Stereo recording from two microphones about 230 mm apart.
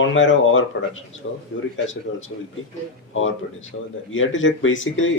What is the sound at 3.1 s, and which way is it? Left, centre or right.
Speech, left.